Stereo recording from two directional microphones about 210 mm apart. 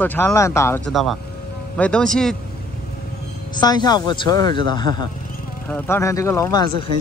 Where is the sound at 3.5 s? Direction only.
20° left (ahead or behind).